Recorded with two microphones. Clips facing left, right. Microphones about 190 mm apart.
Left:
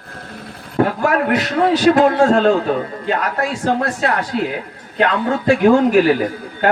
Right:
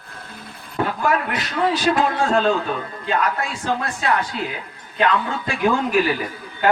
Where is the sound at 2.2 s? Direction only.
45° left (ahead or behind).